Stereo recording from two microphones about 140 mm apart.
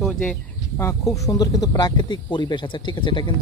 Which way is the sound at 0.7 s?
20° left (ahead or behind).